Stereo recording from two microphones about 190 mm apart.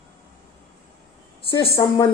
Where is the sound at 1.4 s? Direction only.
30° left (ahead or behind).